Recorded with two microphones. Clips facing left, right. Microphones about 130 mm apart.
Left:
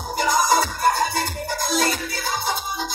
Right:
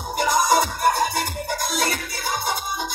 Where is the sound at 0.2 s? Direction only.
20° right (ahead or behind).